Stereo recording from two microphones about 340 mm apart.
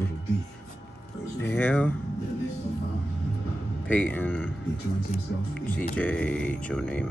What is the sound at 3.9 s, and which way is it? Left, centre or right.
Speech, centre.